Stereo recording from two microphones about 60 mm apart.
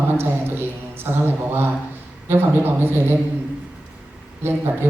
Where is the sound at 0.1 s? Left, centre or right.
Right.